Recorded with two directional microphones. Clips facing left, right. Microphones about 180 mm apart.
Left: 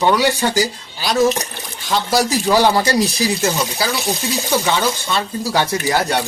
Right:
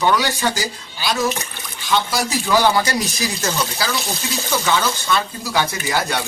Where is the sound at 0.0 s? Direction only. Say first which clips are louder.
Left 3 dB; 30° left (ahead or behind).